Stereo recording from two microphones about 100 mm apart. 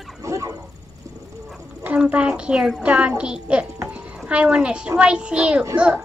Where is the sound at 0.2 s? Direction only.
30° right (ahead or behind).